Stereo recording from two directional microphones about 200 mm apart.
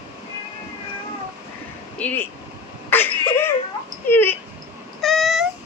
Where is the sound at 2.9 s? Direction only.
10° left (ahead or behind).